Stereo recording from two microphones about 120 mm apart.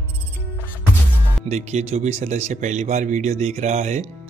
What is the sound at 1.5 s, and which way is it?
Speech, 70° right (ahead or behind).